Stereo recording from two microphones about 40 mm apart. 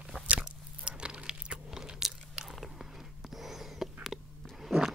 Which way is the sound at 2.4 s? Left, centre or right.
Centre.